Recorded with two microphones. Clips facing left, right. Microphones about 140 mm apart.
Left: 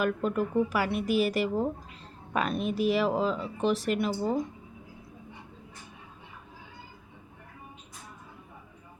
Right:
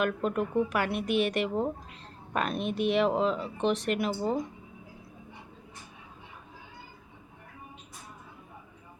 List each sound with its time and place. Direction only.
0.0 s speech: centre (ahead or behind)